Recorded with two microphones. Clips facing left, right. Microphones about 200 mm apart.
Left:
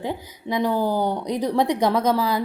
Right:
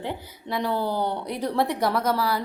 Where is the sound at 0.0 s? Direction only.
15° left (ahead or behind).